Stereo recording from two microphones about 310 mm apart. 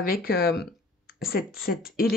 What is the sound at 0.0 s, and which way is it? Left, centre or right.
Speech, left.